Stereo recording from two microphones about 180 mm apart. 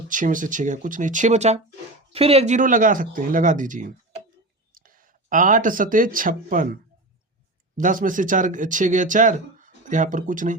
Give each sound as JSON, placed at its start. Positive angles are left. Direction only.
{"t": 0.1, "sound": "speech", "side_deg": -45}
{"t": 7.8, "sound": "speech", "side_deg": -45}